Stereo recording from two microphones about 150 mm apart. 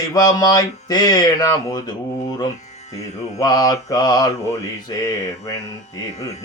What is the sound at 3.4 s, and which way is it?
Speech, 25° left (ahead or behind).